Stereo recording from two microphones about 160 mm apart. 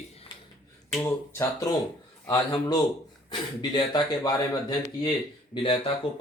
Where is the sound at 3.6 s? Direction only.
30° left (ahead or behind).